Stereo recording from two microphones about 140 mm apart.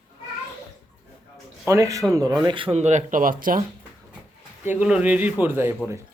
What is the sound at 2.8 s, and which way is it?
Speech, 55° right (ahead or behind).